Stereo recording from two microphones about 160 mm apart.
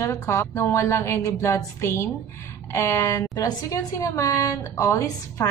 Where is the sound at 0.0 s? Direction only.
15° left (ahead or behind).